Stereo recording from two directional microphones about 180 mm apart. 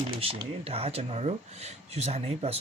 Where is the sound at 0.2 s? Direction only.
30° right (ahead or behind).